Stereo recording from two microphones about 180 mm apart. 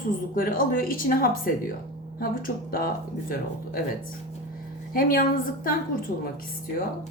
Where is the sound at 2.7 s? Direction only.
55° left (ahead or behind).